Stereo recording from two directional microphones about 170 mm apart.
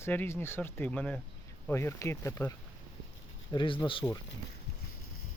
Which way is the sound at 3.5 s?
30° left (ahead or behind).